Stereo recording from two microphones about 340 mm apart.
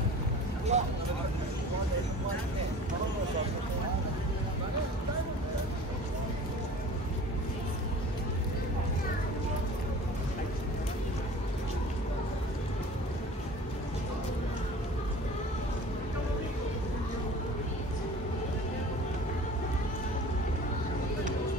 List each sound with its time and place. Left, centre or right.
0.7 s speech: centre